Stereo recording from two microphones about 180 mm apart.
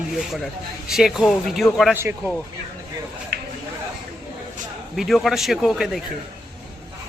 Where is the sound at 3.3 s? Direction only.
65° right (ahead or behind).